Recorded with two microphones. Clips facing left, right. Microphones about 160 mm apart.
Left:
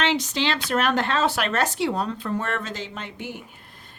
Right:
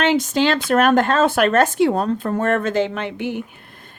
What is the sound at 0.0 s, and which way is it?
Speech, 50° right (ahead or behind).